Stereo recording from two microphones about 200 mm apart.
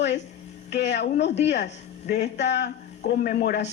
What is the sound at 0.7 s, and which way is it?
Speech, 60° left (ahead or behind).